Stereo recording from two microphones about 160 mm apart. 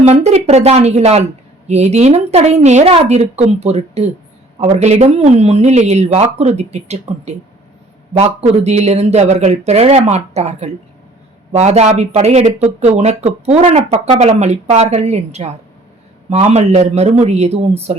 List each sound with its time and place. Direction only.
0.0 s a woman's voice: 45° right (ahead or behind)
8.1 s a woman's voice: 40° right (ahead or behind)